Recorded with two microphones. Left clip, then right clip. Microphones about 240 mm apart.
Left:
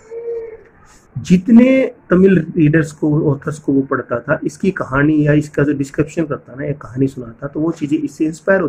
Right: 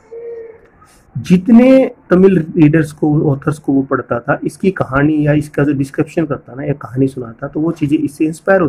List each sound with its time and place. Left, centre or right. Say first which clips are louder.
1.2 s a man's voice: right 2 dB; centre